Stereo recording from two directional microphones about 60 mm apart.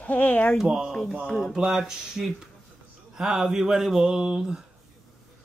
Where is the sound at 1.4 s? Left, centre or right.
Centre.